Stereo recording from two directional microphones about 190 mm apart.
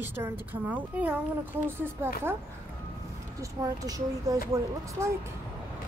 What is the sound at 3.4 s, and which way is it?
Speech, 20° right (ahead or behind).